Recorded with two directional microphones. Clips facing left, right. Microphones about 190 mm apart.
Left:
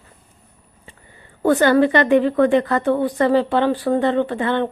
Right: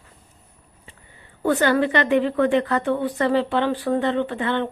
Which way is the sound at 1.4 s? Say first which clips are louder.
Left 5 dB; 45° left (ahead or behind).